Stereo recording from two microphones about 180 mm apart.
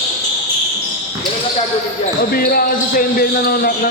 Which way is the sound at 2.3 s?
55° left (ahead or behind).